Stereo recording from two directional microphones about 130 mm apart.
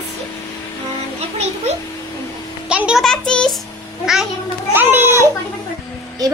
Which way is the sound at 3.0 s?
5° left (ahead or behind).